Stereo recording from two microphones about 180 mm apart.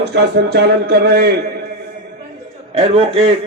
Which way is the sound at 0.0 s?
70° right (ahead or behind).